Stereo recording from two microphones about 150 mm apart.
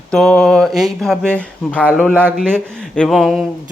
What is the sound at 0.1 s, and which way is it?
Speech, 5° left (ahead or behind).